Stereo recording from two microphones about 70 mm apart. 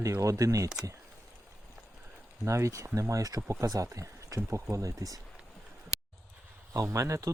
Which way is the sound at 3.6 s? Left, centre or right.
Right.